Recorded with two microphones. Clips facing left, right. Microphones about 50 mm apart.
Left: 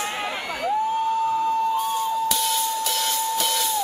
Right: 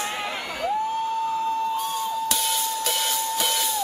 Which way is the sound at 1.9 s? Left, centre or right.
Centre.